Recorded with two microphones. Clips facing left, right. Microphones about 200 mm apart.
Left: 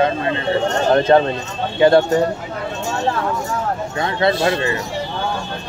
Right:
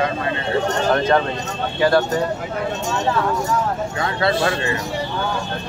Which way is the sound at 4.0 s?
20° left (ahead or behind).